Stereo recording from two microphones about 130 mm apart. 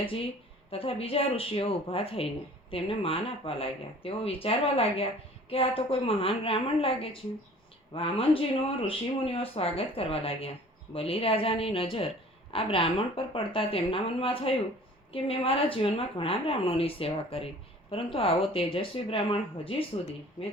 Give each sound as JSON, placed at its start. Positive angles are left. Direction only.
{"t": 0.7, "sound": "speech", "side_deg": 45}